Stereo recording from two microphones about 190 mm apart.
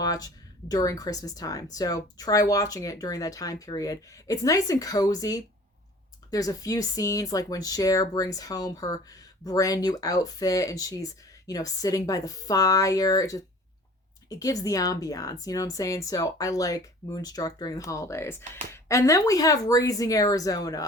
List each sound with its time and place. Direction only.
0.0 s a woman's voice: 20° left (ahead or behind)